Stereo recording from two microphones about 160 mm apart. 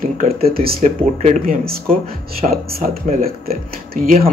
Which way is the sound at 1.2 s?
50° right (ahead or behind).